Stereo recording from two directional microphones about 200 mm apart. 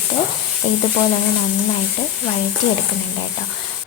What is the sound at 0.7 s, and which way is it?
Speech, 35° left (ahead or behind).